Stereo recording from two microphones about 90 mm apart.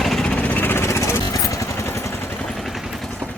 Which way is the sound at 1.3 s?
40° left (ahead or behind).